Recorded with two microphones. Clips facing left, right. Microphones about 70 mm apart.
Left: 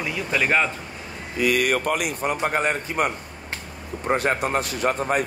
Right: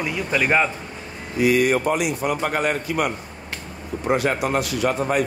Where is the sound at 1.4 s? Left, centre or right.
Left.